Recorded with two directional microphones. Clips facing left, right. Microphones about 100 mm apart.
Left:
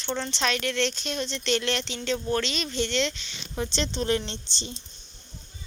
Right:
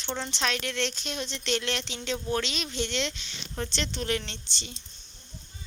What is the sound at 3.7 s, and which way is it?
Speech, 25° left (ahead or behind).